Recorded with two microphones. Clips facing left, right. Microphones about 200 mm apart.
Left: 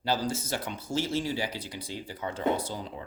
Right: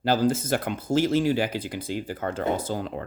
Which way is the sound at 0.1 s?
50° right (ahead or behind).